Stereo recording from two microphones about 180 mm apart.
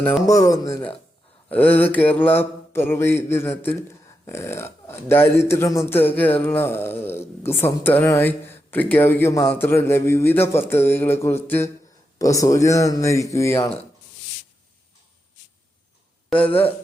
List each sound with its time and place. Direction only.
0.3 s mantra: 20° left (ahead or behind)